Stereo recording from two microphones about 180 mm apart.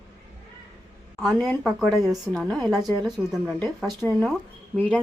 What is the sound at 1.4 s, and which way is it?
A woman's voice, centre (ahead or behind).